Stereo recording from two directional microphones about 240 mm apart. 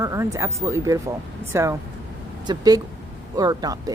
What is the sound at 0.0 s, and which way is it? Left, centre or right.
A woman's voice, centre.